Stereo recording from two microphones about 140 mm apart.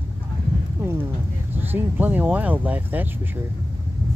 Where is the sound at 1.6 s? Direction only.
15° right (ahead or behind).